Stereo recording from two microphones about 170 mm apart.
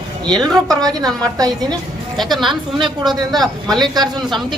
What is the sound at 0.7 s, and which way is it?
Speech, 20° right (ahead or behind).